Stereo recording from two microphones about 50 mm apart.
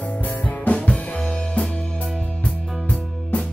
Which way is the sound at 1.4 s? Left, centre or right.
Centre.